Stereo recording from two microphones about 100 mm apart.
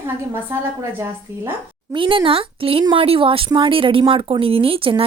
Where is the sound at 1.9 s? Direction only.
60° right (ahead or behind).